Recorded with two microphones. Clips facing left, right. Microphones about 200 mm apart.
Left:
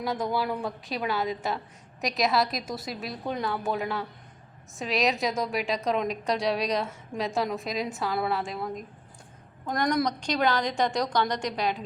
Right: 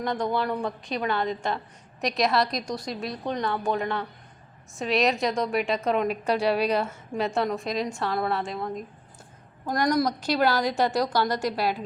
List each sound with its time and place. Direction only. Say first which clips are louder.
0.0 s a woman's voice: right 2 dB; 5° left (ahead or behind)